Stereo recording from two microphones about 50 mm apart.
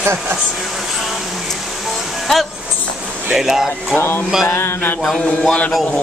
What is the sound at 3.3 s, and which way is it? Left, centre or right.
Speech, centre.